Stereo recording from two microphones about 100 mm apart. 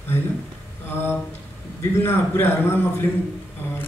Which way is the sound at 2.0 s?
25° left (ahead or behind).